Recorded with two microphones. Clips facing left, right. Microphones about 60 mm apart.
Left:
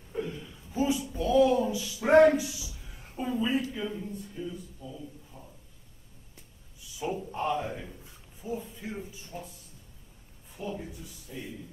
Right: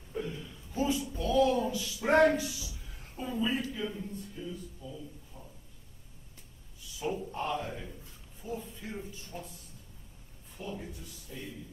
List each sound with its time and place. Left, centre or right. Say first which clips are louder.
0.1 s a sound: left 2 dB; centre
1.0 s speech: left 4 dB; centre
7.0 s a man's voice: left 2 dB; centre
10.6 s speech: left 4 dB; centre